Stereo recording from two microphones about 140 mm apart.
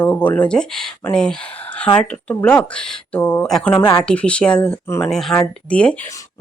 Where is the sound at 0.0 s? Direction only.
10° left (ahead or behind).